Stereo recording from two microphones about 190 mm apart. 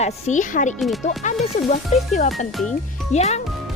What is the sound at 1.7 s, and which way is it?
A child's voice, 40° left (ahead or behind).